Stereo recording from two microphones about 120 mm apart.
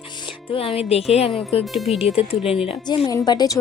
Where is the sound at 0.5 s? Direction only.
50° left (ahead or behind).